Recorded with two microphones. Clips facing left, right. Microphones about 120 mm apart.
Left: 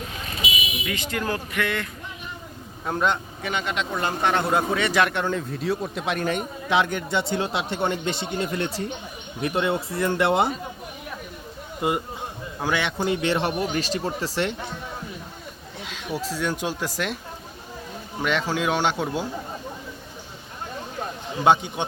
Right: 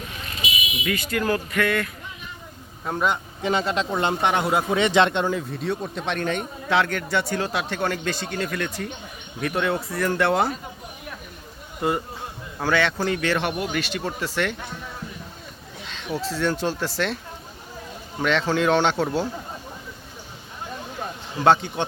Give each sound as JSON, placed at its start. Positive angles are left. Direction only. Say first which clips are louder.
{"t": 0.9, "sound": "speech", "louder": "right 5 dB", "side_deg": 20}
{"t": 2.8, "sound": "speech", "louder": "even", "side_deg": 0}
{"t": 3.4, "sound": "speech", "louder": "right 5 dB", "side_deg": -35}
{"t": 3.9, "sound": "speech", "louder": "even", "side_deg": -20}
{"t": 4.8, "sound": "speech", "louder": "right 3 dB", "side_deg": -25}
{"t": 5.2, "sound": "speech", "louder": "right 1 dB", "side_deg": -5}
{"t": 6.7, "sound": "speech", "louder": "even", "side_deg": 15}
{"t": 11.8, "sound": "speech", "louder": "even", "side_deg": 15}
{"t": 15.9, "sound": "speech", "louder": "right 1 dB", "side_deg": 10}
{"t": 18.2, "sound": "speech", "louder": "right 3 dB", "side_deg": 10}
{"t": 21.4, "sound": "speech", "louder": "right 1 dB", "side_deg": 15}